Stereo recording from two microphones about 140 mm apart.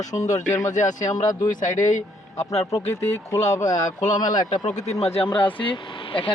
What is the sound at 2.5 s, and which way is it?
Speech, 50° left (ahead or behind).